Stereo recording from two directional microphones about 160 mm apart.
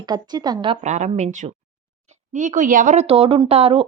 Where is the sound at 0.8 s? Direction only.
50° right (ahead or behind).